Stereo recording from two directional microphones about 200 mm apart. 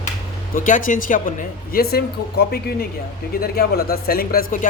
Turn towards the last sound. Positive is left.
turn(degrees=45)  # may be behind; listen again after turning